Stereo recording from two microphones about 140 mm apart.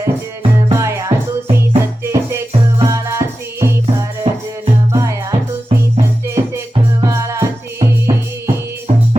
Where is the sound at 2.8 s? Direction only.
20° right (ahead or behind).